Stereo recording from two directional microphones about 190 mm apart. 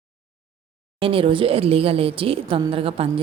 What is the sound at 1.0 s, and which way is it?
A woman's voice, 30° right (ahead or behind).